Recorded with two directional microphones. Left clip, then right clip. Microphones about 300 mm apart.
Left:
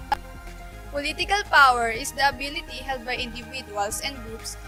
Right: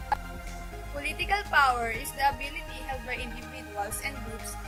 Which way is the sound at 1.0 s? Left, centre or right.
Left.